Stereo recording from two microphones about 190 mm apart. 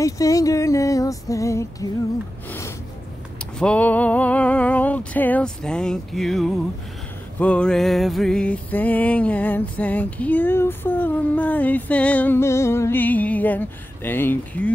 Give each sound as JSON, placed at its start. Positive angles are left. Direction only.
{"t": 0.0, "sound": "music", "side_deg": 15}
{"t": 3.5, "sound": "a sound", "side_deg": 5}
{"t": 7.3, "sound": "music", "side_deg": 5}